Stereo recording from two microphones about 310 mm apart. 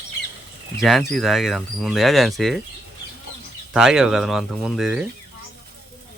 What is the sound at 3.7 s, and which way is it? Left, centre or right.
Speech, centre.